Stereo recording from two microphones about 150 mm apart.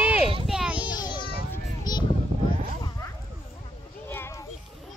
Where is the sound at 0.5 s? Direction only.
5° right (ahead or behind).